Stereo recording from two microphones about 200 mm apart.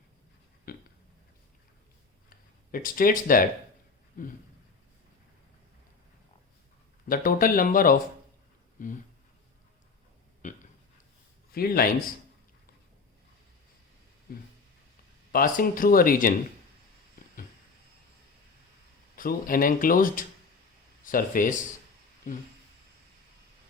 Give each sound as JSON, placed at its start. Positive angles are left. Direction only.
{"t": 0.7, "sound": "burping", "side_deg": 50}
{"t": 2.7, "sound": "speech", "side_deg": 45}
{"t": 7.1, "sound": "speech", "side_deg": 45}
{"t": 8.8, "sound": "a sound", "side_deg": 40}
{"t": 10.4, "sound": "a sound", "side_deg": 40}
{"t": 11.5, "sound": "speech", "side_deg": 50}
{"t": 15.3, "sound": "speech", "side_deg": 45}
{"t": 19.1, "sound": "speech", "side_deg": 45}